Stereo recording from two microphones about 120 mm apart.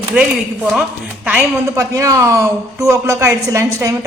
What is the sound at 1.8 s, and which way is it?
A woman's voice, 25° right (ahead or behind).